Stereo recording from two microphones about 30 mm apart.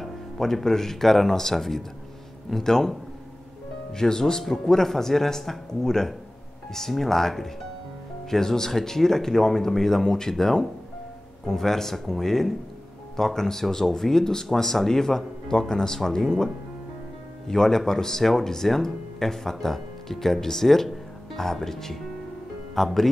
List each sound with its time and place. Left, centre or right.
0.0 s music: centre
0.7 s speech: centre
3.9 s speech: centre
17.5 s speech: centre